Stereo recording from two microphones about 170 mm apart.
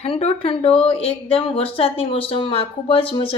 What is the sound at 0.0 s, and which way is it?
Speech, 40° left (ahead or behind).